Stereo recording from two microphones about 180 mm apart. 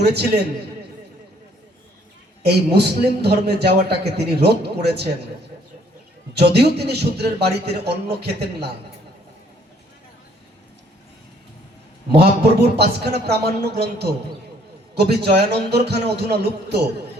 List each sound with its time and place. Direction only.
0.0 s a man's voice: 65° right (ahead or behind)
2.4 s a man's voice: 65° right (ahead or behind)
6.3 s a man's voice: 65° right (ahead or behind)
12.7 s a man's voice: 65° right (ahead or behind)